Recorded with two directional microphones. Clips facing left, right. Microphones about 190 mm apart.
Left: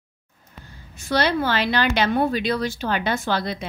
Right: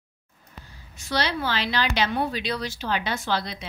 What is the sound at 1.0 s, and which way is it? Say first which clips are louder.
A woman's voice: left 5 dB; 55° left (ahead or behind).